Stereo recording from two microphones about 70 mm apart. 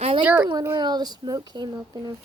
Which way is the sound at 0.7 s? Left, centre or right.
Right.